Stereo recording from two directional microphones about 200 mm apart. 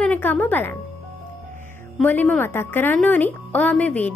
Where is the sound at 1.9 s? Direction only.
10° left (ahead or behind).